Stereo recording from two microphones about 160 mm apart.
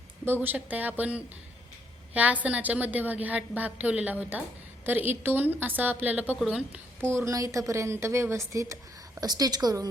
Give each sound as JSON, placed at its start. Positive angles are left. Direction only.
{"t": 0.4, "sound": "a woman's voice", "side_deg": -10}